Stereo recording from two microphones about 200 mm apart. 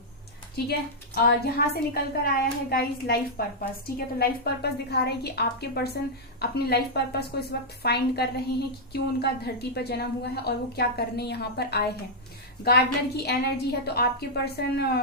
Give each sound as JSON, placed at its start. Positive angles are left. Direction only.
{"t": 0.5, "sound": "a woman's voice", "side_deg": 50}